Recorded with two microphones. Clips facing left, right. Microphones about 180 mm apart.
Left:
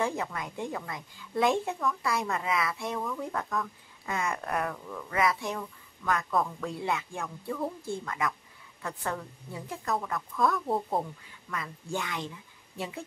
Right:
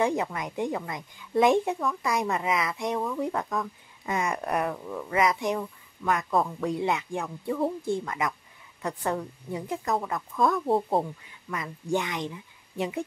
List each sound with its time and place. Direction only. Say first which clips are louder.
0.0 s a woman's voice: right 5 dB; 15° right (ahead or behind)
11.5 s a woman's voice: right 6 dB; 20° right (ahead or behind)